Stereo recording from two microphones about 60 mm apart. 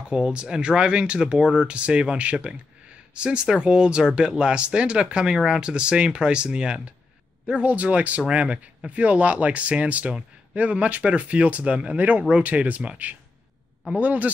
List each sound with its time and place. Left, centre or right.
0.1 s speech: centre